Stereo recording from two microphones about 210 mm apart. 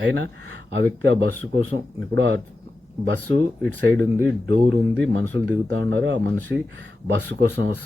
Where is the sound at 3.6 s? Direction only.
10° left (ahead or behind).